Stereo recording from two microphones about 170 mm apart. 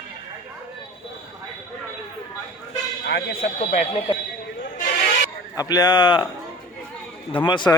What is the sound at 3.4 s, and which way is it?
Speech, 45° left (ahead or behind).